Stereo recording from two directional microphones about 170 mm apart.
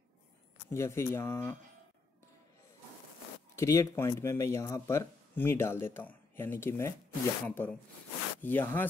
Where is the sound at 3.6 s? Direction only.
20° left (ahead or behind).